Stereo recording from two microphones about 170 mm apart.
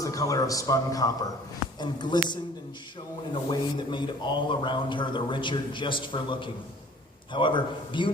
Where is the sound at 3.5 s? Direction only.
25° left (ahead or behind).